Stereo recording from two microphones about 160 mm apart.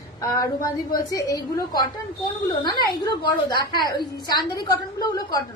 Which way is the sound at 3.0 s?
25° left (ahead or behind).